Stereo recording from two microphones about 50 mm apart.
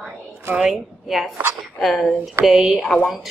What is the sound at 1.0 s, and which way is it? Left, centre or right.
A woman's voice, centre.